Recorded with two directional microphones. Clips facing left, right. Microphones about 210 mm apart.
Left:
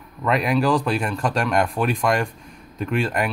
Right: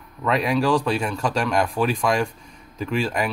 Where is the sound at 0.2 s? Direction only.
Centre (ahead or behind).